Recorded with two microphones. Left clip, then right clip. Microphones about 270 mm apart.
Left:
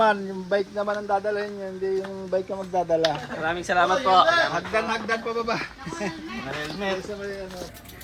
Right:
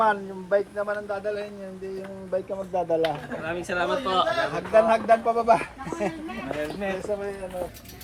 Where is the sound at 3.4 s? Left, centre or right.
Centre.